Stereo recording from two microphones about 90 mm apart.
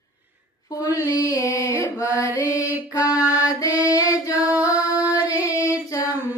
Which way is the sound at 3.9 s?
40° left (ahead or behind).